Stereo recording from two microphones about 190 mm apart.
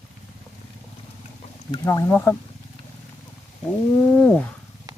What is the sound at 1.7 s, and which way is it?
Speech, 15° left (ahead or behind).